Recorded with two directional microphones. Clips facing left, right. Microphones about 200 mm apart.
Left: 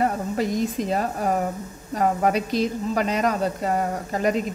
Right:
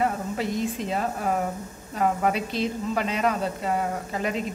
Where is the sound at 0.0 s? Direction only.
40° left (ahead or behind).